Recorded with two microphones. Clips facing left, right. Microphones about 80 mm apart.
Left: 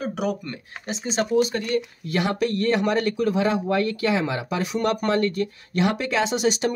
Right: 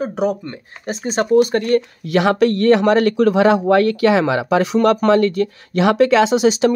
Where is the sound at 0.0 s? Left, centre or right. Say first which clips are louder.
Right 7 dB; right.